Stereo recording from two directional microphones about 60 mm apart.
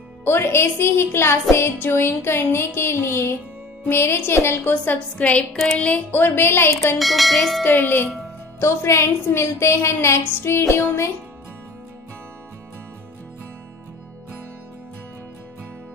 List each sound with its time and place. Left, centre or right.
0.2 s a woman's voice: left
4.9 s a woman's voice: left
6.2 s a woman's voice: left
7.0 s bell: centre
7.6 s a woman's voice: left
8.5 s a woman's voice: left